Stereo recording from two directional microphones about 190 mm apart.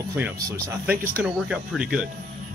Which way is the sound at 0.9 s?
50° right (ahead or behind).